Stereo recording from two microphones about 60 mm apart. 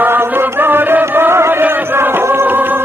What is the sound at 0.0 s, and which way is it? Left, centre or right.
Chant, right.